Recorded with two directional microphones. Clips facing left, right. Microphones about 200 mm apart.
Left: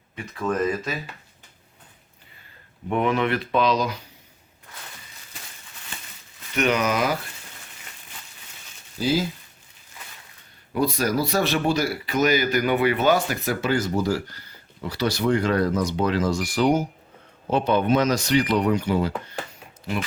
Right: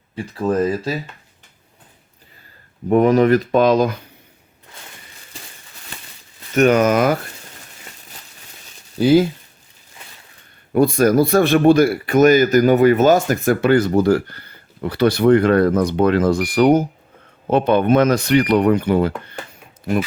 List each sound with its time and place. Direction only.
0.2 s speech: 30° right (ahead or behind)
2.9 s speech: 40° right (ahead or behind)
6.5 s speech: 45° right (ahead or behind)
9.0 s speech: 60° right (ahead or behind)
10.7 s speech: 50° right (ahead or behind)